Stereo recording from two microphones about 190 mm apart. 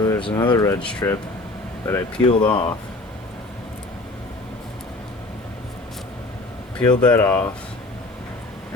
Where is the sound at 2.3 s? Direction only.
25° left (ahead or behind).